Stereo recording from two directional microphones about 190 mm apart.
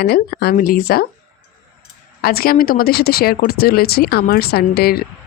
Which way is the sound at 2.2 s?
55° left (ahead or behind).